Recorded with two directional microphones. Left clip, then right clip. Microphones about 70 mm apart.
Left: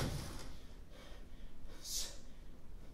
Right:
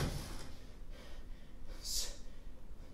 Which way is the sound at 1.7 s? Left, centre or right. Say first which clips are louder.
Right 3 dB; centre.